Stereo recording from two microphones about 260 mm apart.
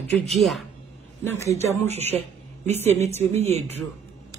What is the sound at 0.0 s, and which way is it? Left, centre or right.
Speech, centre.